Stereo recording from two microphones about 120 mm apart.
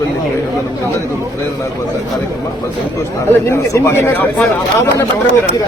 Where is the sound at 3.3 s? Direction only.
20° left (ahead or behind).